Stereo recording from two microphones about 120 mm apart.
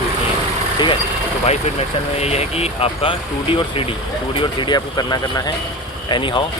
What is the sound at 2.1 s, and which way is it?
Speech, 60° left (ahead or behind).